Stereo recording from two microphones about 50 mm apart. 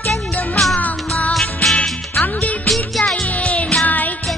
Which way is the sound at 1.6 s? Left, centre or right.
Left.